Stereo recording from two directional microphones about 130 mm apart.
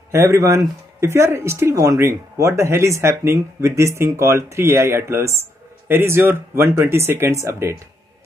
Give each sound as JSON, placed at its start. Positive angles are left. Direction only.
{"t": 0.1, "sound": "speech", "side_deg": -20}